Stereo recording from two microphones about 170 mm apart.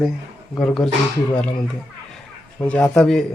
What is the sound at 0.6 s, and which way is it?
Speech, 5° left (ahead or behind).